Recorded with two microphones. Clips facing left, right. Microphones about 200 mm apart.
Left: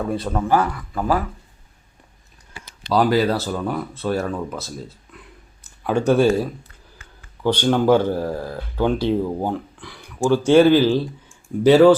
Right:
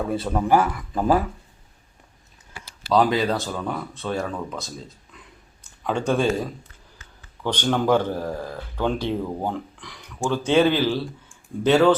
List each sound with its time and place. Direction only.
0.1 s speech: 5° right (ahead or behind); by 1.2 s 20° right (ahead or behind)
2.9 s speech: 5° left (ahead or behind)
5.8 s speech: 10° left (ahead or behind)
7.4 s speech: 10° left (ahead or behind)